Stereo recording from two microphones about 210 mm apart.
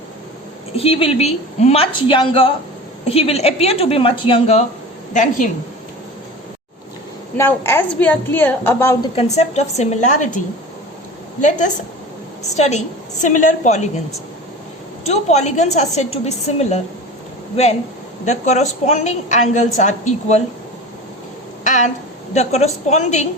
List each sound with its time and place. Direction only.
0.8 s a woman's voice: 25° left (ahead or behind)
7.3 s a woman's voice: 10° left (ahead or behind)
9.1 s a woman's voice: 30° left (ahead or behind)
12.4 s a sound: 30° left (ahead or behind)
13.2 s a woman's voice: 35° left (ahead or behind)
15.0 s a woman's voice: 30° left (ahead or behind)
18.3 s a woman's voice: 35° left (ahead or behind)
21.6 s a sound: 35° left (ahead or behind)
22.4 s a woman's voice: 30° left (ahead or behind)